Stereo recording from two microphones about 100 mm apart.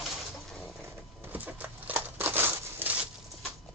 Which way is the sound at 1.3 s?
15° right (ahead or behind).